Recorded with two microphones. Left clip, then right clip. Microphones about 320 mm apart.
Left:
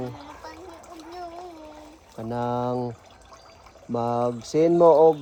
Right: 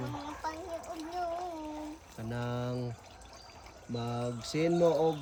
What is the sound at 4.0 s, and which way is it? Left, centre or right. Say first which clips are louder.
Speech: left 13 dB; centre.